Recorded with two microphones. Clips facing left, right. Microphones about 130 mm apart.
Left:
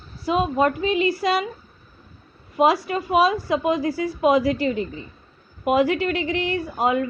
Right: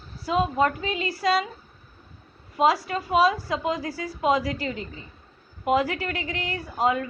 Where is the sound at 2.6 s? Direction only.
20° left (ahead or behind).